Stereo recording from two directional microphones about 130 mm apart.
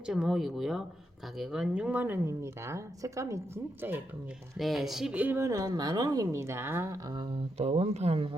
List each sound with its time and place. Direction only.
0.0 s speech: 5° right (ahead or behind)
4.5 s a woman's voice: centre (ahead or behind); by 7.0 s 20° right (ahead or behind)
7.6 s speech: 50° right (ahead or behind)